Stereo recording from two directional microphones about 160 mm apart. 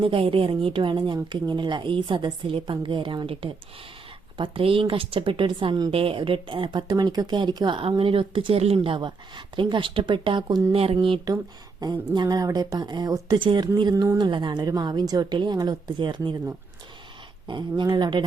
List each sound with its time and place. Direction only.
0.0 s a woman's voice: 35° right (ahead or behind)
17.5 s a woman's voice: 30° right (ahead or behind)